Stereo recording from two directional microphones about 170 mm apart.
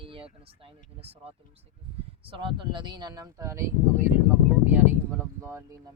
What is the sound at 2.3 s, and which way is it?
Speech, 30° right (ahead or behind).